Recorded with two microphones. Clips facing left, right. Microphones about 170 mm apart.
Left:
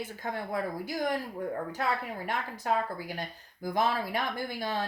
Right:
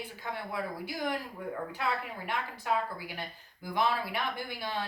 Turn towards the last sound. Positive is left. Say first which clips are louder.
# left 3 dB
turn(degrees=45)  # may be behind; listen again after turning